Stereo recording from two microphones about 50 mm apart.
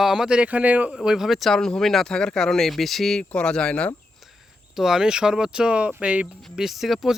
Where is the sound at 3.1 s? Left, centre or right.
Centre.